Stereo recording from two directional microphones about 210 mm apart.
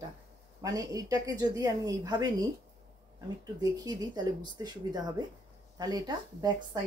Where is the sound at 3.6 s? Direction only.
20° right (ahead or behind).